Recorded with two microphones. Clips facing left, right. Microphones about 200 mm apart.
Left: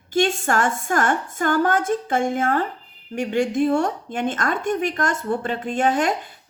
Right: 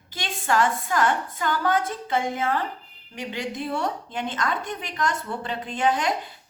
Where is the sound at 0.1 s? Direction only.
50° left (ahead or behind).